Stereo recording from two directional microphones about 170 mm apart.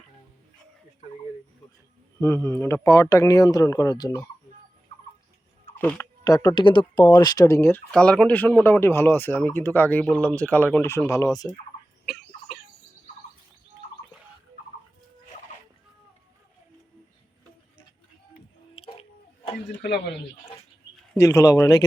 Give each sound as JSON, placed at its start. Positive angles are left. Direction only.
{"t": 2.2, "sound": "speech", "side_deg": 15}
{"t": 5.8, "sound": "speech", "side_deg": 15}
{"t": 18.8, "sound": "a sound", "side_deg": 30}
{"t": 21.2, "sound": "speech", "side_deg": 15}